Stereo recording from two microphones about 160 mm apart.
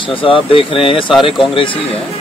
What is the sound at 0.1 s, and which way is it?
Speech, 35° left (ahead or behind).